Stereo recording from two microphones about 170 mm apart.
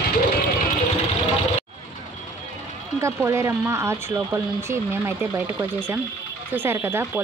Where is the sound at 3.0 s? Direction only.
15° right (ahead or behind).